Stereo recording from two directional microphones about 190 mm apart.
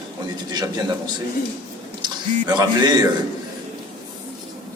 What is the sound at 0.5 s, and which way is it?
Speech, 20° right (ahead or behind).